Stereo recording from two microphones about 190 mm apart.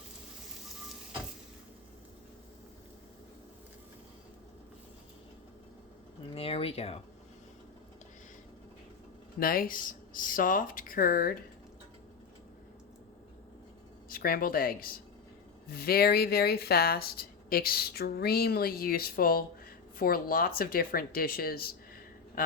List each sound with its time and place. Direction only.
6.3 s speech: 30° left (ahead or behind)
9.4 s speech: 50° left (ahead or behind)
14.1 s speech: 50° left (ahead or behind)
22.4 s a sound: 50° left (ahead or behind)